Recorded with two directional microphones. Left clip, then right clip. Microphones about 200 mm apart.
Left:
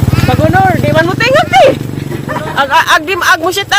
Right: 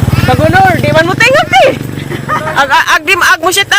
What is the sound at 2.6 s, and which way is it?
Speech, 5° right (ahead or behind).